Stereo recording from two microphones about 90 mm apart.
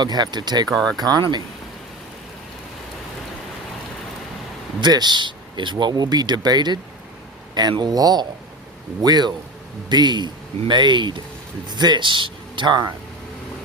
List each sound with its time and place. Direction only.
0.0 s speech: 55° right (ahead or behind)
0.7 s speech: 5° left (ahead or behind)
0.9 s speech: 50° right (ahead or behind)
4.8 s speech: 55° right (ahead or behind)